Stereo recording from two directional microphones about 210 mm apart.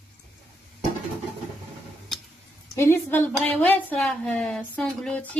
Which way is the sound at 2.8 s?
10° left (ahead or behind).